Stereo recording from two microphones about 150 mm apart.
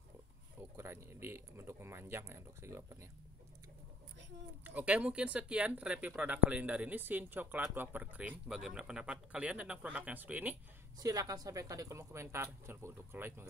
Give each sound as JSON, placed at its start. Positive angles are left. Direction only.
{"t": 0.6, "sound": "speech", "side_deg": -15}
{"t": 4.6, "sound": "speech", "side_deg": -10}
{"t": 11.0, "sound": "a woman's voice", "side_deg": -25}